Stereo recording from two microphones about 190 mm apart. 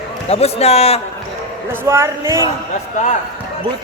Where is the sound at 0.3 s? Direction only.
35° left (ahead or behind).